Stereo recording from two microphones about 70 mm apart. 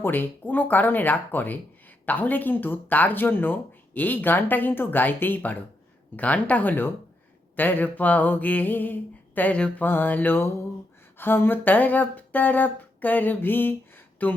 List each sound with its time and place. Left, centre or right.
0.0 s speech: left
9.8 s speech: left